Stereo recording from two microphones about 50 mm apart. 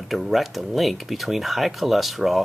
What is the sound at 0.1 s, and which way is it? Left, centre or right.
Speech, centre.